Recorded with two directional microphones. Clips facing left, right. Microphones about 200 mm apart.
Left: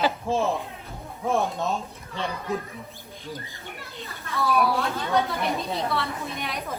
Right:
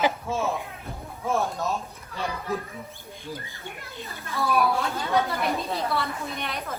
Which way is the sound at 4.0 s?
Centre (ahead or behind).